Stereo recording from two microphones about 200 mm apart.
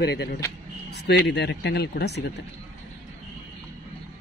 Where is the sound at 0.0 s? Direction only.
55° left (ahead or behind).